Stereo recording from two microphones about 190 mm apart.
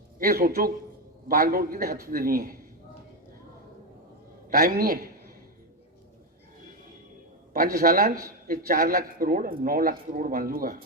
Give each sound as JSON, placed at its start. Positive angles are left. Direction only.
{"t": 0.2, "sound": "a man's voice", "side_deg": -50}
{"t": 4.4, "sound": "a man's voice", "side_deg": -50}
{"t": 7.5, "sound": "a man's voice", "side_deg": -50}